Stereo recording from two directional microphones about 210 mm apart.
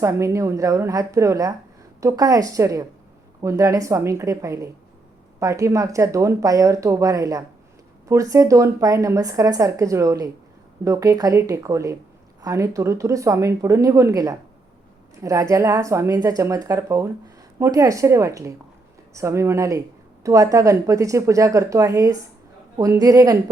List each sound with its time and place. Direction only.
0.0 s speech: 15° right (ahead or behind)